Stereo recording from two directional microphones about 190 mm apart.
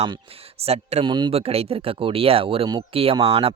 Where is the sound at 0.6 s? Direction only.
35° right (ahead or behind).